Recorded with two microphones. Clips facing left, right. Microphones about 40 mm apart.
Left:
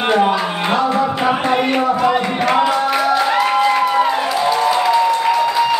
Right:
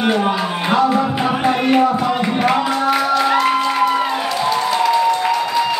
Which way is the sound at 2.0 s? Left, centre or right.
Left.